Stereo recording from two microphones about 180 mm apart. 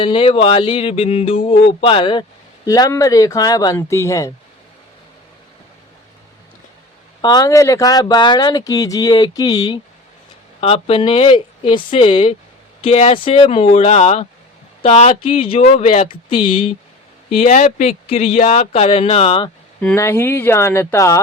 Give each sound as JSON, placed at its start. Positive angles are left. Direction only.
{"t": 0.0, "sound": "speech", "side_deg": 30}
{"t": 7.2, "sound": "speech", "side_deg": 20}
{"t": 17.3, "sound": "speech", "side_deg": 40}
{"t": 19.8, "sound": "speech", "side_deg": 10}